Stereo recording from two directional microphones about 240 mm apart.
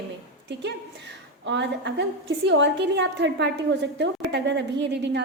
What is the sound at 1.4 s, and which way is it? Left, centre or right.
A woman's voice, right.